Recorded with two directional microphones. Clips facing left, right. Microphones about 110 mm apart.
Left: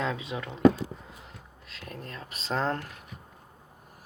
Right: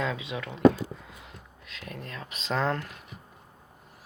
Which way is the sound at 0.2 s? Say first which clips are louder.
Even; 30° left (ahead or behind).